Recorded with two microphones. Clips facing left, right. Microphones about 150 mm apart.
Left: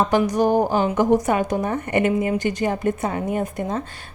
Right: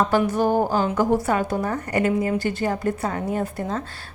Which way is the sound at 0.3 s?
15° left (ahead or behind).